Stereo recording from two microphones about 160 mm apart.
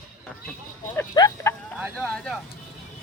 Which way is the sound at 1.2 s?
25° left (ahead or behind).